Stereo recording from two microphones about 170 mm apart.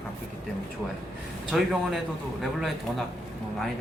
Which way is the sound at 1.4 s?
Centre (ahead or behind).